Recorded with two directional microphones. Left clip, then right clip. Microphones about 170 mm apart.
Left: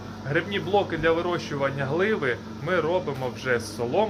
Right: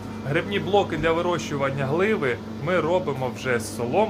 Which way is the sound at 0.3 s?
10° right (ahead or behind).